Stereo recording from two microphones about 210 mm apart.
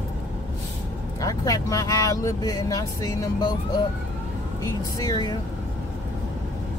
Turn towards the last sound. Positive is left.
turn(degrees=15)  # may be behind; listen again after turning